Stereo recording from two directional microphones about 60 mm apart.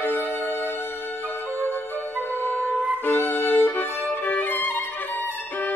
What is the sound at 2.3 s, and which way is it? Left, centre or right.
Music, left.